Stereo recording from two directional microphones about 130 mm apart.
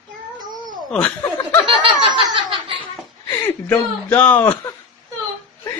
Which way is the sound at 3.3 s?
15° left (ahead or behind).